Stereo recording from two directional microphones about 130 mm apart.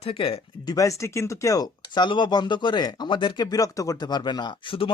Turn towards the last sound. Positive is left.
turn(degrees=40)  # may be behind; listen again after turning